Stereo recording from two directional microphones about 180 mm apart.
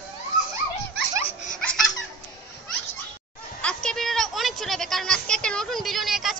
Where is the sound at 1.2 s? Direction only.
45° left (ahead or behind).